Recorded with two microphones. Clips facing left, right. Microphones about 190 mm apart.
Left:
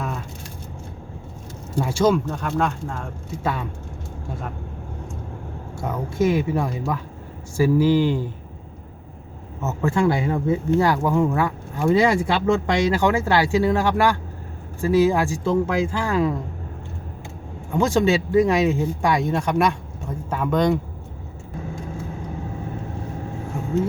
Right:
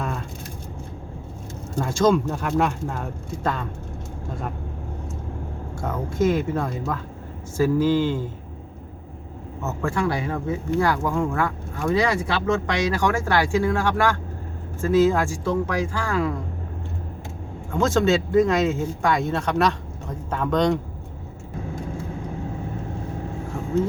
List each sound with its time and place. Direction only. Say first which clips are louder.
0.0 s a sound: even; 5° left (ahead or behind)
1.7 s speech: even; 10° left (ahead or behind)
2.3 s speech: right 1 dB; 5° right (ahead or behind)
3.4 s speech: left 1 dB; 5° left (ahead or behind)
5.8 s speech: left 1 dB; 10° left (ahead or behind)
9.6 s speech: left 4 dB; 20° left (ahead or behind)
11.9 s speech: left 4 dB; 25° left (ahead or behind)
17.7 s speech: left 1 dB; 15° left (ahead or behind)